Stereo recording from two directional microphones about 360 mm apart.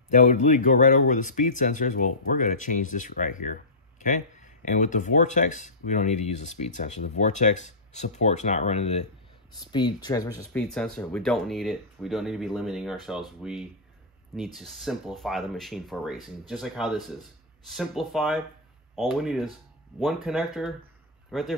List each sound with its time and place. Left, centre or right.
0.1 s speech: centre